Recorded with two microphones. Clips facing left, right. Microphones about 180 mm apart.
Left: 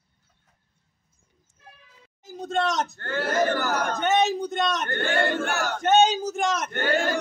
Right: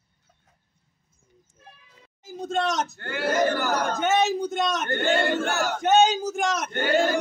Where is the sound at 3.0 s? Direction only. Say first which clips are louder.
Right 1 dB; 10° right (ahead or behind).